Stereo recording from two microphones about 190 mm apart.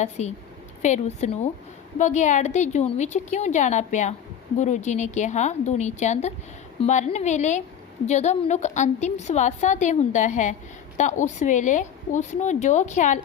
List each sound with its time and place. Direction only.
0.0 s a woman's voice: 35° left (ahead or behind)